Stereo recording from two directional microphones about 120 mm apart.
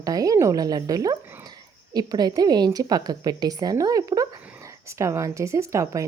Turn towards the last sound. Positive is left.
turn(degrees=-25)  # may be behind; listen again after turning